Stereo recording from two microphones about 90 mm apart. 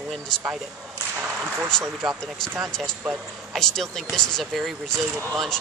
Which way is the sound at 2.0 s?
5° left (ahead or behind).